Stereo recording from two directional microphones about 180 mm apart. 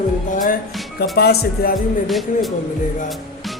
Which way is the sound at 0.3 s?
45° left (ahead or behind).